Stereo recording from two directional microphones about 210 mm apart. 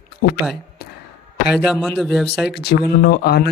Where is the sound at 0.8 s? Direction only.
45° left (ahead or behind).